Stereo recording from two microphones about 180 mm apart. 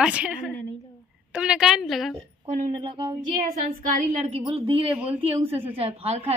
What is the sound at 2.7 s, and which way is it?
Speech, 25° right (ahead or behind).